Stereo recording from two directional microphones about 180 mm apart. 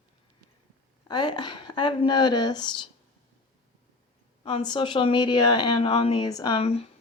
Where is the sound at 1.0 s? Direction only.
25° left (ahead or behind).